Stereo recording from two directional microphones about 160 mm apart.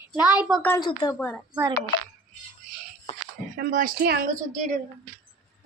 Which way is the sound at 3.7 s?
60° right (ahead or behind).